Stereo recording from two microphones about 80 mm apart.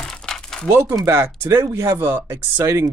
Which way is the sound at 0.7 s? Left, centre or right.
Right.